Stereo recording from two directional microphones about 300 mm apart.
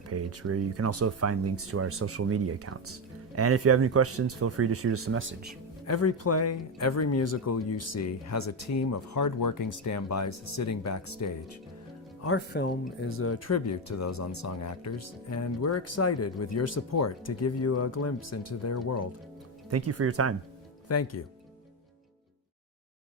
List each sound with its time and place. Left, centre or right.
0.1 s speech: right
5.8 s speech: left
12.2 s speech: left
19.7 s speech: right
20.8 s speech: left